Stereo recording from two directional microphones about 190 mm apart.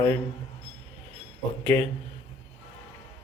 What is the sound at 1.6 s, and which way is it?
Speech, 10° left (ahead or behind).